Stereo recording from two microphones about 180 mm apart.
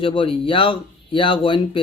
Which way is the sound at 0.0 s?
30° left (ahead or behind).